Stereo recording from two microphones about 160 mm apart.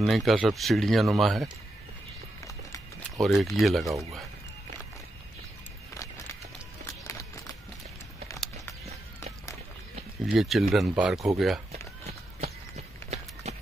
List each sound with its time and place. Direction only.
0.0 s speech: centre (ahead or behind)
3.2 s speech: centre (ahead or behind)
10.2 s speech: centre (ahead or behind)
12.1 s run: 40° right (ahead or behind)